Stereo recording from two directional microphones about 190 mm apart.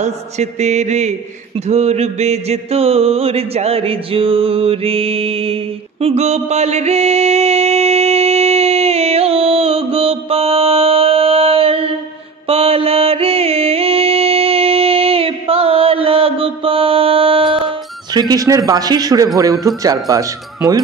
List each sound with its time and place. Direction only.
0.0 s mantra: 35° right (ahead or behind)
1.7 s a sound: 35° right (ahead or behind)
12.4 s music: 30° right (ahead or behind)
18.3 s a man's voice: 20° right (ahead or behind)